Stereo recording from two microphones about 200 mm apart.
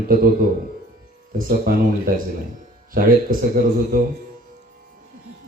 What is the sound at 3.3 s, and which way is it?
Speech, 45° right (ahead or behind).